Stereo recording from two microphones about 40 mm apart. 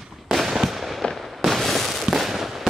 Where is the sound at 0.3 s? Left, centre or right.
Centre.